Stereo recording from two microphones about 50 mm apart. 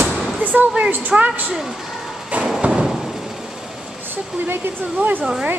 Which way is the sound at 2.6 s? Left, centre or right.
Centre.